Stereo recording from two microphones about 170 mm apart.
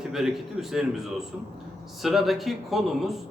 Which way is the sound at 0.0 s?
Centre (ahead or behind).